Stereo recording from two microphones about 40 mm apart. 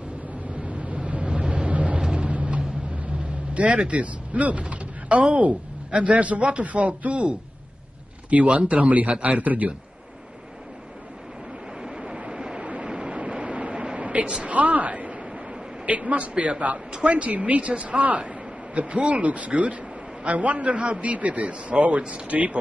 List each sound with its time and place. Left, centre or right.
0.7 s vehicle: right
2.1 s music: right
3.5 s a man's voice: right
11.8 s vehicle: centre
13.2 s vehicle: right
13.9 s a sound: right
14.5 s a woman's voice: right